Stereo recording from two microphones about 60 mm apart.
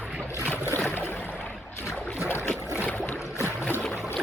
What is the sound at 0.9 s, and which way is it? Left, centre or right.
Boat, left.